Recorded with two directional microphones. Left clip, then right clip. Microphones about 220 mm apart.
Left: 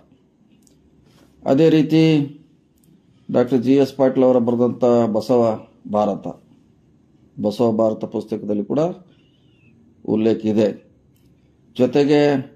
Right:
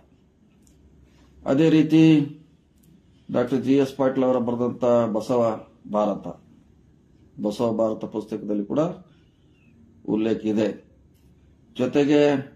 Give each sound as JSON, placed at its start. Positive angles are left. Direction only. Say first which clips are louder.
{"t": 1.4, "sound": "speech", "louder": "left 4 dB", "side_deg": 30}
{"t": 3.3, "sound": "speech", "louder": "left 5 dB", "side_deg": 30}
{"t": 7.3, "sound": "speech", "louder": "left 5 dB", "side_deg": 30}
{"t": 10.0, "sound": "speech", "louder": "left 5 dB", "side_deg": 30}
{"t": 11.7, "sound": "speech", "louder": "left 4 dB", "side_deg": 30}